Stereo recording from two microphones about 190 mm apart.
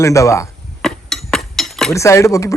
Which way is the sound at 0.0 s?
15° left (ahead or behind).